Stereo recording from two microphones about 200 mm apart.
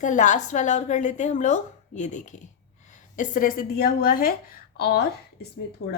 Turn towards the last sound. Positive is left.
turn(degrees=90)